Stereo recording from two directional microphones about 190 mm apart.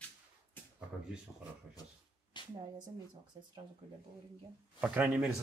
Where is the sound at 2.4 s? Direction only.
25° left (ahead or behind).